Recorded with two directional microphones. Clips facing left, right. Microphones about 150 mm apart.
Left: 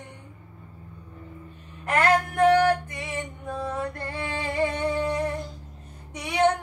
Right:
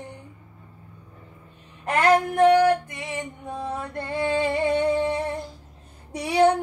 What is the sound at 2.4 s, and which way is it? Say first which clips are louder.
Female singing: right 2 dB; 20° right (ahead or behind).